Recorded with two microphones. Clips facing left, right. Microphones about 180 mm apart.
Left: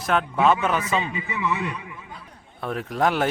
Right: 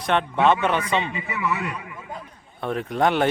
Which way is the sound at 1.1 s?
20° left (ahead or behind).